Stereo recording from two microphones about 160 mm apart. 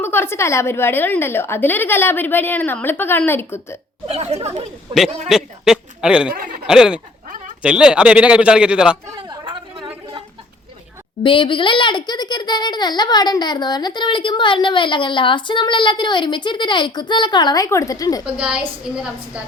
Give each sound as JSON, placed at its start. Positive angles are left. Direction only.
{"t": 0.0, "sound": "a woman's voice", "side_deg": 15}
{"t": 4.0, "sound": "speech", "side_deg": -40}
{"t": 5.3, "sound": "speech", "side_deg": -5}
{"t": 6.3, "sound": "chuckle", "side_deg": -60}
{"t": 6.7, "sound": "speech", "side_deg": -5}
{"t": 7.3, "sound": "a sound", "side_deg": -55}
{"t": 7.6, "sound": "speech", "side_deg": -5}
{"t": 9.1, "sound": "chatter", "side_deg": -30}
{"t": 11.2, "sound": "a child's voice", "side_deg": 30}
{"t": 18.3, "sound": "a woman's voice", "side_deg": -10}